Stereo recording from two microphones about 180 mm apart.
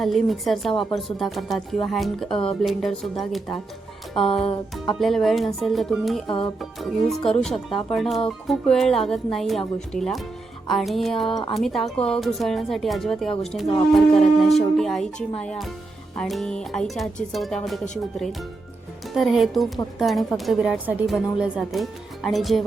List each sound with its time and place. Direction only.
0.0 s a woman's voice: centre (ahead or behind)
0.7 s speech: 30° left (ahead or behind)
0.9 s a woman's voice: centre (ahead or behind)
2.3 s speech: 30° left (ahead or behind)
2.6 s a woman's voice: centre (ahead or behind)
4.2 s music: 30° left (ahead or behind)
4.9 s a woman's voice: centre (ahead or behind)
6.2 s speech: 30° left (ahead or behind)
6.6 s a woman's voice: centre (ahead or behind)
7.7 s speech: 30° left (ahead or behind)
7.9 s a woman's voice: centre (ahead or behind)
11.3 s speech: 25° left (ahead or behind)
11.5 s a woman's voice: centre (ahead or behind)